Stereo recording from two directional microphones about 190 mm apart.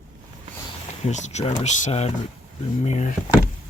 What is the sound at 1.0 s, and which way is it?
Speech, 35° left (ahead or behind).